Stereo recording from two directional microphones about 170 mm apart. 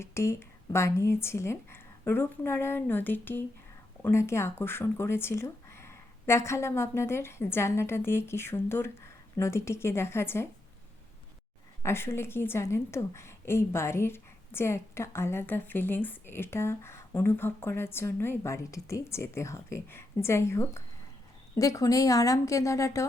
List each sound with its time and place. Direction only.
0.0 s a woman's voice: 15° left (ahead or behind)
11.8 s a woman's voice: 15° left (ahead or behind)